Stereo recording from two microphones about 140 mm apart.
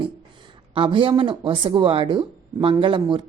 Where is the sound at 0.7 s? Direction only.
40° right (ahead or behind).